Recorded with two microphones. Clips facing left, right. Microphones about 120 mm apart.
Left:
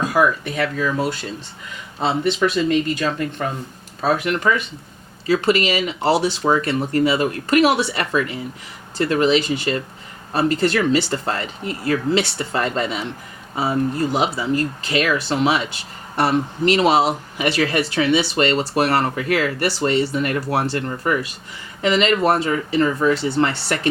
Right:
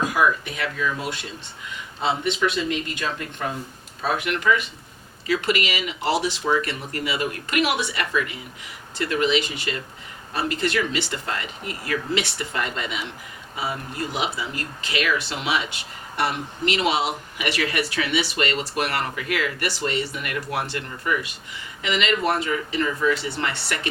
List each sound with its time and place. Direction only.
0.1 s speech: 35° left (ahead or behind)